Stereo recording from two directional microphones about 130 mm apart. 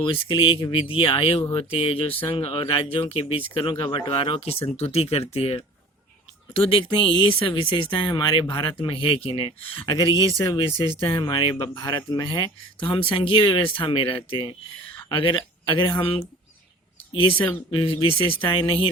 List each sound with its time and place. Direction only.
0.0 s speech: 40° left (ahead or behind)
9.9 s speech: 35° left (ahead or behind)
17.2 s speech: 40° left (ahead or behind)
18.3 s speech: 15° left (ahead or behind)